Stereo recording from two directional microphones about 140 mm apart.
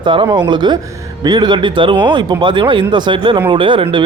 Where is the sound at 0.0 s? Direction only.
35° right (ahead or behind).